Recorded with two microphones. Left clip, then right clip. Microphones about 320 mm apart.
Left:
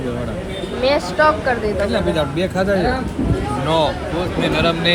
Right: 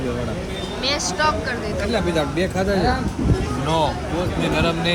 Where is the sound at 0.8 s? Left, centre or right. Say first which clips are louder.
Left 6 dB; centre.